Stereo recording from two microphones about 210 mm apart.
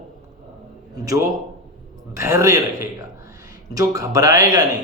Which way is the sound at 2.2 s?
15° right (ahead or behind).